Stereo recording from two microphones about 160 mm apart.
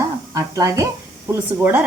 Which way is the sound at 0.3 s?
20° right (ahead or behind).